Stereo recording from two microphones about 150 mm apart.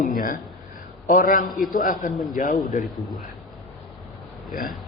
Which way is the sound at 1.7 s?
60° left (ahead or behind).